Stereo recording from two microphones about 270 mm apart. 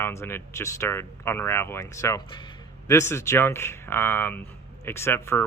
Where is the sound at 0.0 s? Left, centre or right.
Centre.